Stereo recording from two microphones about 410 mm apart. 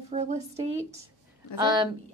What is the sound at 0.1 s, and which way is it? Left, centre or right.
A woman's voice, centre.